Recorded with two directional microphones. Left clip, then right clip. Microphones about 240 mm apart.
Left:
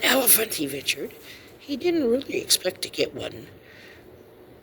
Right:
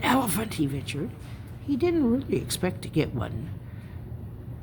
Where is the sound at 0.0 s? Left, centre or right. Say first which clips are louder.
Left 4 dB; centre.